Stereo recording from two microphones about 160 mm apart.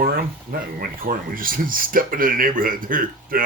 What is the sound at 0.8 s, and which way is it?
Speech, 60° right (ahead or behind).